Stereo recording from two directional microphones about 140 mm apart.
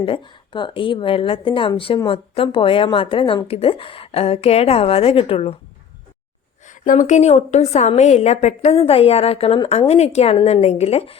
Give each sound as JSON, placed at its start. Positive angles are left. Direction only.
{"t": 0.0, "sound": "a woman's voice", "side_deg": 35}
{"t": 6.7, "sound": "a woman's voice", "side_deg": 65}